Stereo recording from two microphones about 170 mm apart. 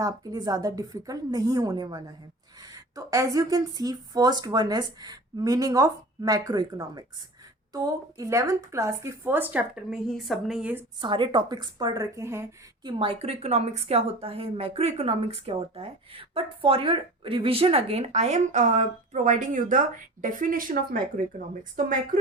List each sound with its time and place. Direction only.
0.0 s a woman's voice: 20° right (ahead or behind)
11.0 s speech: 30° right (ahead or behind)
12.8 s a woman's voice: 30° right (ahead or behind); by 22.1 s 55° right (ahead or behind)